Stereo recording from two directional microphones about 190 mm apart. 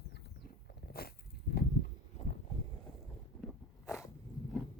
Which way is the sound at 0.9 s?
55° left (ahead or behind).